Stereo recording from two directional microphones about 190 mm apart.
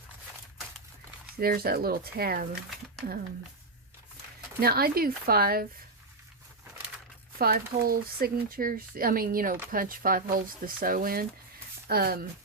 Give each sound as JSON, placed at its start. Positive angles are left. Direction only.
{"t": 1.4, "sound": "speech", "side_deg": -50}
{"t": 4.6, "sound": "speech", "side_deg": -55}
{"t": 7.3, "sound": "speech", "side_deg": -50}